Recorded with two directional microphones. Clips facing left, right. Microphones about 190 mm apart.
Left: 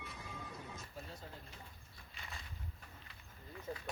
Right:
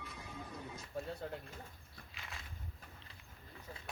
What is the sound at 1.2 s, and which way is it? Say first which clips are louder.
Pigeon: right 9 dB; 60° right (ahead or behind).